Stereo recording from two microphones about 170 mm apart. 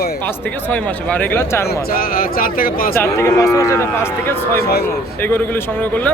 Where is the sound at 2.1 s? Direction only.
55° left (ahead or behind).